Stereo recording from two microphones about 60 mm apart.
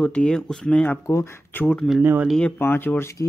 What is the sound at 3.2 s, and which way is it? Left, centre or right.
Speech, left.